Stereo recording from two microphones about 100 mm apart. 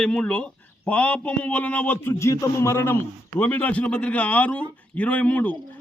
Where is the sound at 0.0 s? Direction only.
10° left (ahead or behind).